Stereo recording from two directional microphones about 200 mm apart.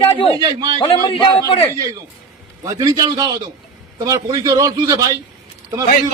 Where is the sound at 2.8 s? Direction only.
20° right (ahead or behind).